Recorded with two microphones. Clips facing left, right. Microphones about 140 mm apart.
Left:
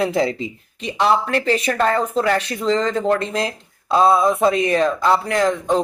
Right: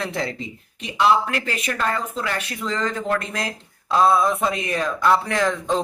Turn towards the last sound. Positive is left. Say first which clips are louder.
# left 4 dB
turn(degrees=20)  # may be behind; listen again after turning